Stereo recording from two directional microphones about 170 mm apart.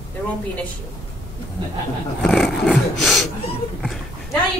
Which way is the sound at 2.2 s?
5° left (ahead or behind).